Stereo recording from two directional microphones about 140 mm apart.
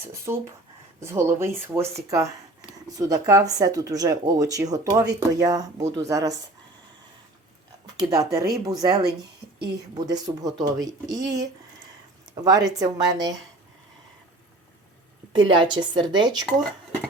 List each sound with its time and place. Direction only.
0.1 s speech: 20° right (ahead or behind)
7.9 s speech: 25° right (ahead or behind)
12.3 s speech: 30° right (ahead or behind)
15.3 s a woman's voice: 35° right (ahead or behind)